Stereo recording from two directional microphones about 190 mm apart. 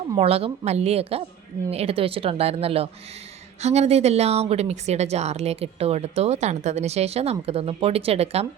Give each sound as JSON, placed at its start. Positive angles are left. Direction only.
{"t": 0.2, "sound": "speech", "side_deg": -30}